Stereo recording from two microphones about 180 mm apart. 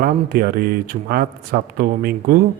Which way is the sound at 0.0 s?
55° right (ahead or behind).